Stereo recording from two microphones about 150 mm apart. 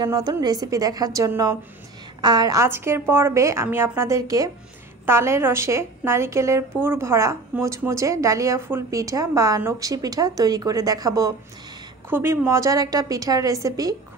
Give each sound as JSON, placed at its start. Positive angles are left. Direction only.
{"t": 0.0, "sound": "a woman's voice", "side_deg": -25}